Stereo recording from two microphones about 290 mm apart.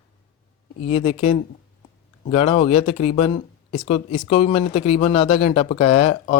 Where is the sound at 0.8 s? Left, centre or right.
Left.